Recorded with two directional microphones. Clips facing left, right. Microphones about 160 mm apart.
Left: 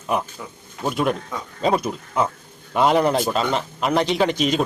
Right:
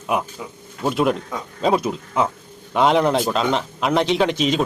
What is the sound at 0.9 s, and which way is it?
Speech, centre (ahead or behind).